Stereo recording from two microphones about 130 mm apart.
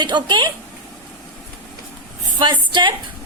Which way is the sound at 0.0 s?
35° right (ahead or behind).